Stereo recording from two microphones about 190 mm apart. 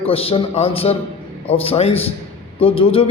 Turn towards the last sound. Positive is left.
turn(degrees=30)  # may be behind; listen again after turning